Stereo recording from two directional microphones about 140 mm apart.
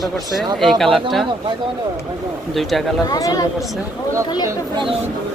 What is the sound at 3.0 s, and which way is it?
Speech, 25° left (ahead or behind).